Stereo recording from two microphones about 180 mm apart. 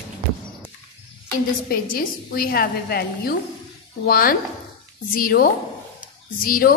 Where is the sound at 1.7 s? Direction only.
55° left (ahead or behind).